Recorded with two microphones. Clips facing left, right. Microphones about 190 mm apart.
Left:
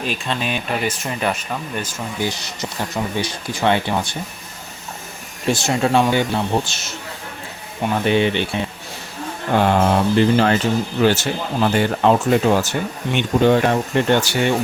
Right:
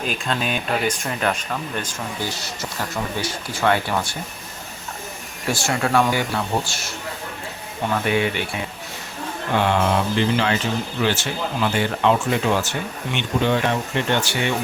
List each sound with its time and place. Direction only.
0.0 s speech: centre (ahead or behind); by 4.2 s 20° left (ahead or behind)
5.5 s a man's voice: 20° left (ahead or behind)
8.0 s a man's voice: 25° left (ahead or behind)
9.6 s speech: 45° left (ahead or behind)